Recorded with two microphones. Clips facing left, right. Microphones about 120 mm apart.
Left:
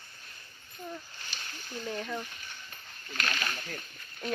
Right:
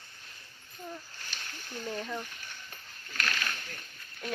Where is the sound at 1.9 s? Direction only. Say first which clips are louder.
Left 1 dB; centre (ahead or behind).